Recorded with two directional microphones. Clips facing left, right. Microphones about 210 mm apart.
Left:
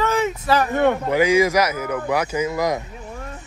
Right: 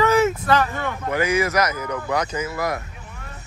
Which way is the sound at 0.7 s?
60° left (ahead or behind).